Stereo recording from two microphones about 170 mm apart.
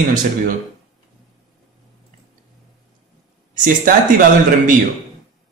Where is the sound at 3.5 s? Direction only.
50° right (ahead or behind).